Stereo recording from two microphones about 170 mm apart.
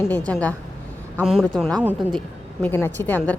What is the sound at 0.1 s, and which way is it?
A woman's voice, 10° left (ahead or behind).